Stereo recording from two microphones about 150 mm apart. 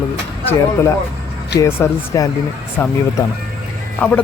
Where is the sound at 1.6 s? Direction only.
20° left (ahead or behind).